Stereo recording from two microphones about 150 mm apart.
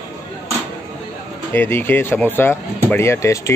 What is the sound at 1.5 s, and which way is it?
Speech, 15° left (ahead or behind).